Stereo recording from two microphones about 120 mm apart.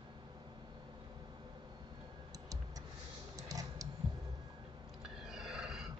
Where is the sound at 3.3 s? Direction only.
30° right (ahead or behind).